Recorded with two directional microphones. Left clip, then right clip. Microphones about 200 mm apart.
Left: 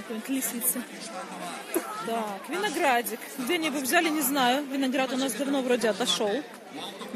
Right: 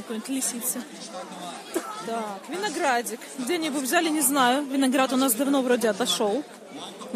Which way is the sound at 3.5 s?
10° right (ahead or behind).